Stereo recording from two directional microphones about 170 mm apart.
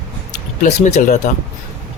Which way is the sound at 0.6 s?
45° left (ahead or behind).